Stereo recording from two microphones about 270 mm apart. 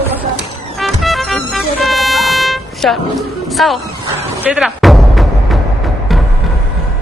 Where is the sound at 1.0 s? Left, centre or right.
Centre.